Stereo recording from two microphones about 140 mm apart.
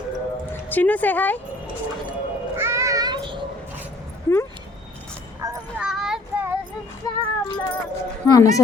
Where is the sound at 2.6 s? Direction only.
20° right (ahead or behind).